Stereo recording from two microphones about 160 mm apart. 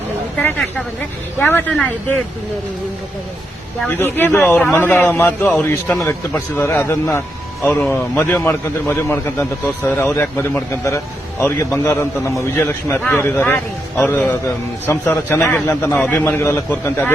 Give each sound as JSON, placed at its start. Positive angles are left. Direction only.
{"t": 0.4, "sound": "a man's voice", "side_deg": 10}
{"t": 3.8, "sound": "a man's voice", "side_deg": 10}